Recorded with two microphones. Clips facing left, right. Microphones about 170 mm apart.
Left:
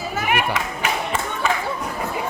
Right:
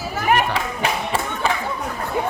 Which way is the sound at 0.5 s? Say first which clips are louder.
Right 1 dB; 30° right (ahead or behind).